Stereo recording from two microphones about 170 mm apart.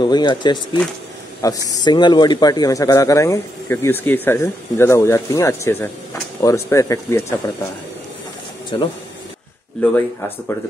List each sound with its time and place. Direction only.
0.0 s speech: 25° left (ahead or behind)
1.7 s speech: 25° left (ahead or behind)
8.7 s speech: 30° left (ahead or behind)
9.8 s speech: 10° left (ahead or behind)